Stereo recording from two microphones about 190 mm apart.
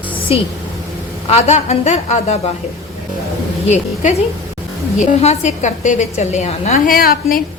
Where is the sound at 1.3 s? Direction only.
35° left (ahead or behind).